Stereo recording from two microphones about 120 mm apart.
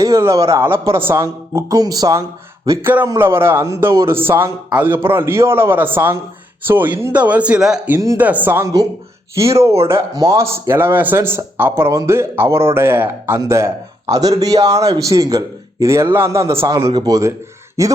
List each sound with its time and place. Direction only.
0.0 s speech: 25° right (ahead or behind)
2.6 s speech: 20° right (ahead or behind)
7.9 s speech: 25° right (ahead or behind)